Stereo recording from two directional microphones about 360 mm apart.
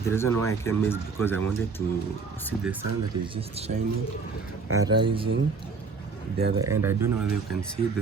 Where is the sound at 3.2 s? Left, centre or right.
Centre.